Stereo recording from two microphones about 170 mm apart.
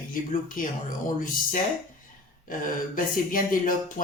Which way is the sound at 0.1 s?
55° left (ahead or behind).